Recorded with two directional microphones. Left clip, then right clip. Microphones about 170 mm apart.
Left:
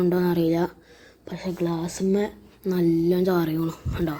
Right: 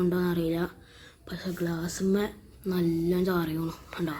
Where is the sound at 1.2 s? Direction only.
10° left (ahead or behind).